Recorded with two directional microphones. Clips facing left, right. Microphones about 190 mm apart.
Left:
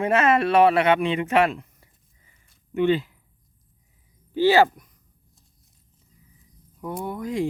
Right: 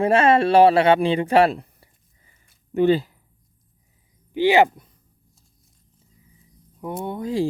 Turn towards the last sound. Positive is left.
turn(degrees=-30)  # may be behind; listen again after turning